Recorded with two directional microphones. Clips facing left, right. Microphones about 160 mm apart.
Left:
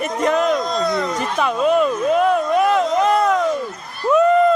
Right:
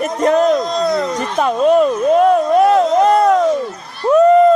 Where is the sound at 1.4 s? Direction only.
40° right (ahead or behind).